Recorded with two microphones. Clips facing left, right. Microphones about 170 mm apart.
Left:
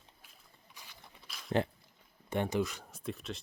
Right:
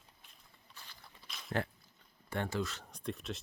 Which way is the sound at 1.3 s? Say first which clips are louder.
Left 5 dB; centre (ahead or behind).